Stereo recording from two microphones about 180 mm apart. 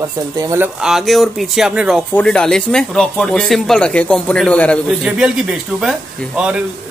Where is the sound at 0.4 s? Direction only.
15° right (ahead or behind).